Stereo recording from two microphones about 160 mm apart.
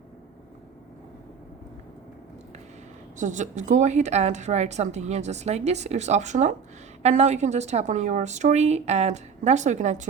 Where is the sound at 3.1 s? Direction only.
50° right (ahead or behind).